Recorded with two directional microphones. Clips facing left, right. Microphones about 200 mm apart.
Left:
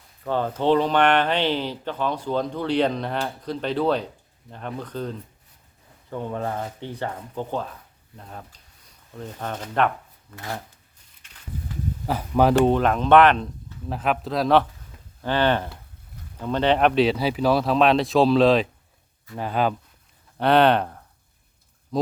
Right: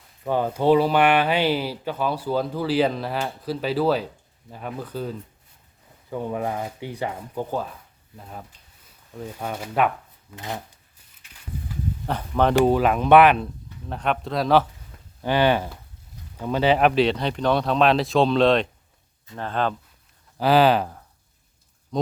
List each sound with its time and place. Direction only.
0.3 s speech: 10° right (ahead or behind)
10.3 s speech: 20° right (ahead or behind)
12.0 s speech: 5° left (ahead or behind)
12.6 s speech: 5° right (ahead or behind)
13.8 s speech: 5° left (ahead or behind)
15.2 s speech: 10° right (ahead or behind); by 19.7 s 10° left (ahead or behind)
20.4 s speech: 5° right (ahead or behind)